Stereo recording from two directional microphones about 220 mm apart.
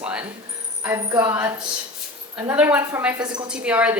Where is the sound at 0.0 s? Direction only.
5° right (ahead or behind).